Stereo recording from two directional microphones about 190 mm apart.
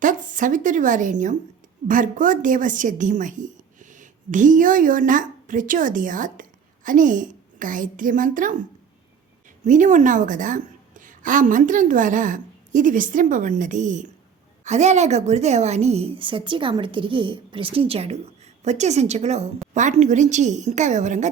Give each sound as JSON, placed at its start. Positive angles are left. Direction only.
{"t": 0.0, "sound": "a woman's voice", "side_deg": -45}
{"t": 9.6, "sound": "a woman's voice", "side_deg": -40}